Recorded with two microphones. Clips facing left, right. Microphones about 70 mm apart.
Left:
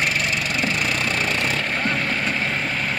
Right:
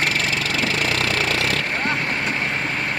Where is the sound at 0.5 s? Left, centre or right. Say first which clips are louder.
Right 1 dB; right.